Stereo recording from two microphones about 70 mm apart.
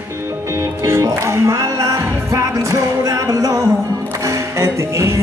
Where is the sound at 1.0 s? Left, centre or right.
Right.